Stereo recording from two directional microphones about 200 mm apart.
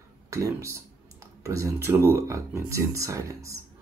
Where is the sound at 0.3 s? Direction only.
15° right (ahead or behind).